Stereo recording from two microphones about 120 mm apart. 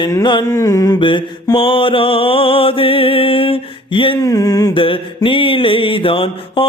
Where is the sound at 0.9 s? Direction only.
45° left (ahead or behind).